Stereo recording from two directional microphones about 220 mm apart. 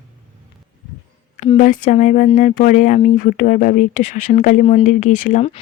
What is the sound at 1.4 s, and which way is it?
Speech, 30° left (ahead or behind).